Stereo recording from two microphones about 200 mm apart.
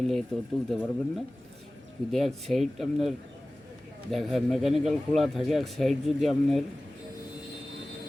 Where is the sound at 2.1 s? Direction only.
Centre (ahead or behind).